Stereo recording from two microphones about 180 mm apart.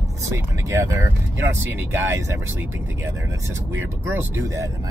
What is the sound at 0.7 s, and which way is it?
Speech, 15° right (ahead or behind).